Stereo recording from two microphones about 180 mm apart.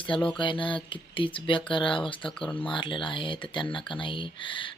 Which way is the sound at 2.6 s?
25° left (ahead or behind).